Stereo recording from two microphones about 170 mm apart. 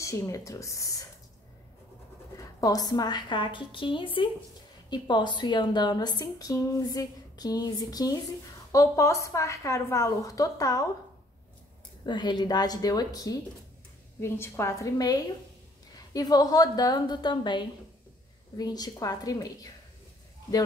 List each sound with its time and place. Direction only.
0.0 s a woman's voice: 20° left (ahead or behind)
2.3 s a woman's voice: 20° left (ahead or behind)
12.1 s a woman's voice: 25° left (ahead or behind)